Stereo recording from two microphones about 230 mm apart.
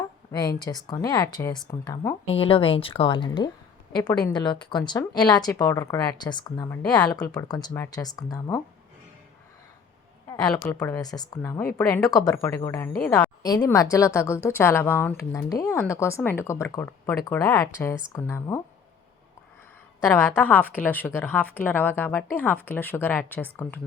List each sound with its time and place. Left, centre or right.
0.3 s speech: centre
2.2 s speech: left
10.2 s a sound: centre
10.5 s a woman's voice: centre
20.3 s speech: centre